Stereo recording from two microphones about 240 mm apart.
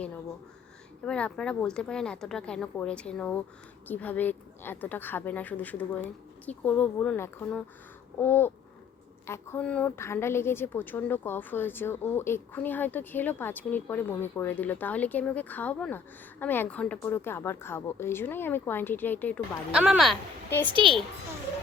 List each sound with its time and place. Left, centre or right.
1.0 s a woman's voice: centre
20.7 s a woman's voice: right